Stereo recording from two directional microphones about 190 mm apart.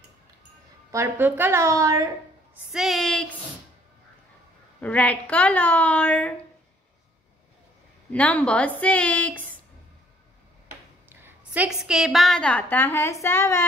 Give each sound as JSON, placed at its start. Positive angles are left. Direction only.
{"t": 0.9, "sound": "a woman's voice", "side_deg": -10}
{"t": 2.7, "sound": "speech", "side_deg": 0}
{"t": 4.7, "sound": "a woman's voice", "side_deg": 5}
{"t": 8.1, "sound": "a woman's voice", "side_deg": 5}
{"t": 11.1, "sound": "a woman's voice", "side_deg": -10}